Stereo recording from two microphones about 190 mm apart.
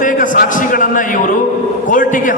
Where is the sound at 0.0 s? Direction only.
45° left (ahead or behind).